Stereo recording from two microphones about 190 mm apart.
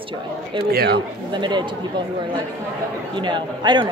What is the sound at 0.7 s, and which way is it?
Speech, 55° right (ahead or behind).